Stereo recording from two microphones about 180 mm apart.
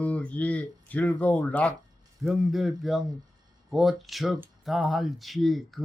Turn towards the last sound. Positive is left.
turn(degrees=0)  # may be behind; listen again after turning